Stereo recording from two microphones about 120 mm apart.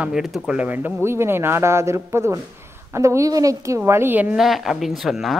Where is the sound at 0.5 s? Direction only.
15° right (ahead or behind).